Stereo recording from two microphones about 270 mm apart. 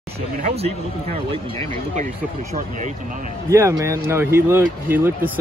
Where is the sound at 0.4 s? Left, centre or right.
Right.